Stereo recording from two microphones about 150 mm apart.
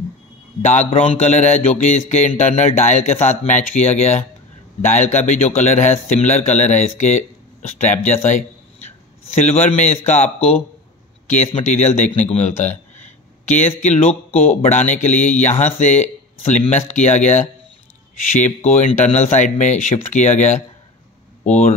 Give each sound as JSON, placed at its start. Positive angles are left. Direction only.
{"t": 0.6, "sound": "speech", "side_deg": 50}
{"t": 11.6, "sound": "speech", "side_deg": 55}